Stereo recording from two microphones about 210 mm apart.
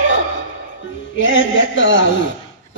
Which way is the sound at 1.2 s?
65° left (ahead or behind).